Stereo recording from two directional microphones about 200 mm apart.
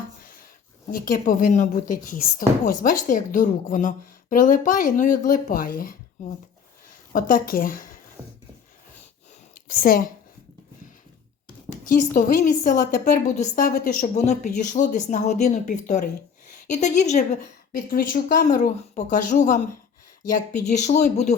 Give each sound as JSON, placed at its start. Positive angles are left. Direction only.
{"t": 0.9, "sound": "a woman's voice", "side_deg": 45}
{"t": 9.6, "sound": "a woman's voice", "side_deg": 45}
{"t": 11.9, "sound": "a woman's voice", "side_deg": 45}
{"t": 20.7, "sound": "a woman's voice", "side_deg": 35}